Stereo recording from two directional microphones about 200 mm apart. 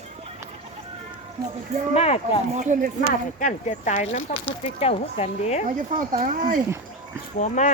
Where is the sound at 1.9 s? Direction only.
30° left (ahead or behind).